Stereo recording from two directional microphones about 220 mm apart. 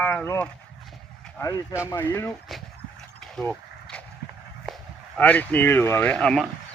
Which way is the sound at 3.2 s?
5° left (ahead or behind).